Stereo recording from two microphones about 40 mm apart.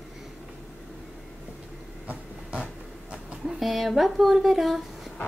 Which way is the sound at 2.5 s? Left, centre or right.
Right.